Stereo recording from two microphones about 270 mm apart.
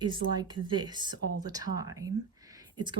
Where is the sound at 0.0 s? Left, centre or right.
Centre.